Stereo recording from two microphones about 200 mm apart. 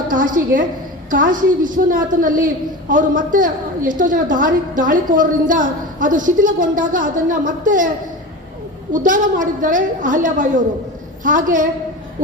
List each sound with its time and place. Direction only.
0.1 s a woman's voice: 40° right (ahead or behind)
8.9 s a woman's voice: 40° right (ahead or behind)